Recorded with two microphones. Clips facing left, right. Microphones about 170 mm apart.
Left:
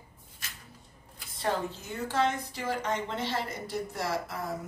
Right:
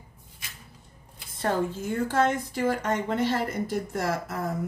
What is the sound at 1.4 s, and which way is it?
A woman's voice, 50° right (ahead or behind).